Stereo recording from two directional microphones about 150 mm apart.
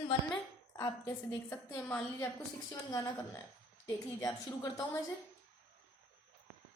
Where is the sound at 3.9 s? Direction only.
25° left (ahead or behind).